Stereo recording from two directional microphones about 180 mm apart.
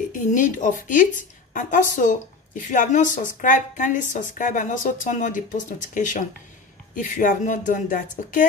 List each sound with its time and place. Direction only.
0.1 s a woman's voice: 45° left (ahead or behind)